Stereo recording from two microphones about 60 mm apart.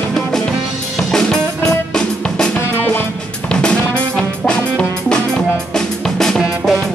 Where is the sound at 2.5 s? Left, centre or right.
Left.